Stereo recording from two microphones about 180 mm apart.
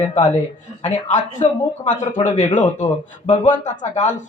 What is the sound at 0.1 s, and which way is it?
A man's voice, 40° left (ahead or behind).